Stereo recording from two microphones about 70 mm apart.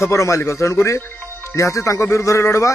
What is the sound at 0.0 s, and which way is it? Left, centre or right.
Speech, left.